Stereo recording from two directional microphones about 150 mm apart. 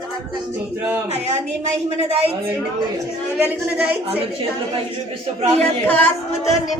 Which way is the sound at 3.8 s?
5° right (ahead or behind).